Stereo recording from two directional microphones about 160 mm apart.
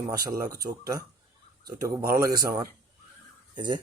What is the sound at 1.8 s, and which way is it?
Speech, 20° right (ahead or behind).